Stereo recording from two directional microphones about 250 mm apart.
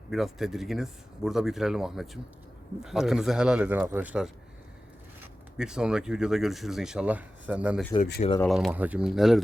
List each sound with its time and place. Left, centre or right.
0.1 s speech: centre